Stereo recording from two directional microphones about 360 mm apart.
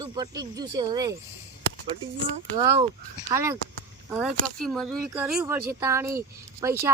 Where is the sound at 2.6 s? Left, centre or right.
Centre.